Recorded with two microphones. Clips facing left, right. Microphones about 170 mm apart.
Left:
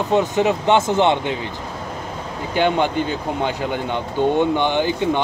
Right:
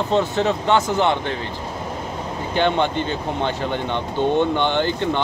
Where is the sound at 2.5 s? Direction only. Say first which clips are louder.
Left 1 dB; 10° left (ahead or behind).